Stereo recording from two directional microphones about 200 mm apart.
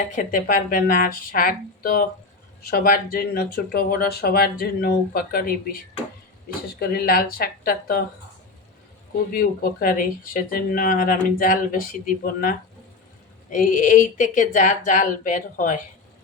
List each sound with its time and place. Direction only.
0.1 s speech: 40° left (ahead or behind)
9.3 s speech: 45° left (ahead or behind)